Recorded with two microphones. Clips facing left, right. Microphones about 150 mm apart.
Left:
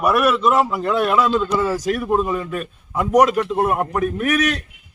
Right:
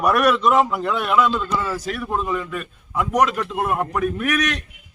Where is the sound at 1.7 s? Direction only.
40° left (ahead or behind).